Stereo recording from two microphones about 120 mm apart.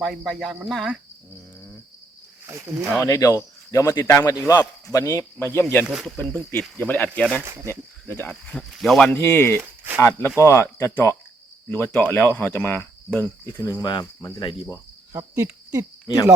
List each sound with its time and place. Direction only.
0.0 s speech: 5° left (ahead or behind)
2.5 s speech: 25° right (ahead or behind)
2.9 s speech: 25° left (ahead or behind)
5.8 s speech: 5° right (ahead or behind)
6.3 s speech: 15° left (ahead or behind)
7.4 s speech: 25° right (ahead or behind)
7.7 s speech: 20° left (ahead or behind); by 9.1 s 5° left (ahead or behind)
9.1 s speech: 20° left (ahead or behind)
9.6 s a sound: 15° right (ahead or behind)
10.0 s speech: 20° left (ahead or behind)
15.1 s cricket: 25° right (ahead or behind)